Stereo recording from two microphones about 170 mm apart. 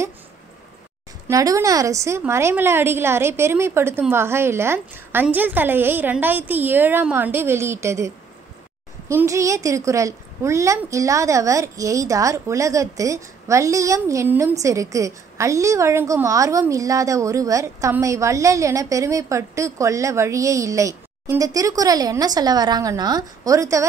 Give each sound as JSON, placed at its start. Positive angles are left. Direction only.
{"t": 1.2, "sound": "a woman's voice", "side_deg": -20}
{"t": 9.1, "sound": "a woman's voice", "side_deg": -20}